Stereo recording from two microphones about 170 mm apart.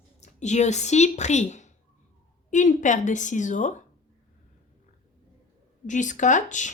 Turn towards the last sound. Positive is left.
turn(degrees=45)  # may be behind; listen again after turning